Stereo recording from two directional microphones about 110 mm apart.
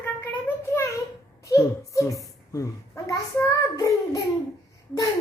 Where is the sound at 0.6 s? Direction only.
25° left (ahead or behind).